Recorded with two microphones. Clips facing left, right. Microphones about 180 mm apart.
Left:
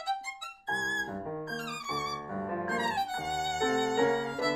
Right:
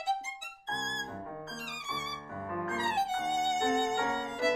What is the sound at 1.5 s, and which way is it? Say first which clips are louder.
Music: left 5 dB; 20° right (ahead or behind).